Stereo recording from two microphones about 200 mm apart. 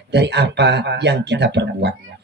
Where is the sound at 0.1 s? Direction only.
60° right (ahead or behind).